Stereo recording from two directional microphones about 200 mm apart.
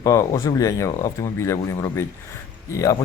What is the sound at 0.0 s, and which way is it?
Speech, 15° left (ahead or behind).